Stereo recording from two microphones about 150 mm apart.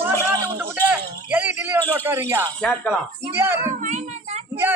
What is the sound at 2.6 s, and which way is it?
Speech, 5° left (ahead or behind).